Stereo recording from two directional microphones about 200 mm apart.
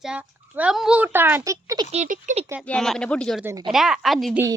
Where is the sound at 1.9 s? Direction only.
35° right (ahead or behind).